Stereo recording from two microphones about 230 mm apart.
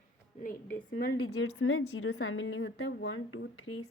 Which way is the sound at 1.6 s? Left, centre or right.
Left.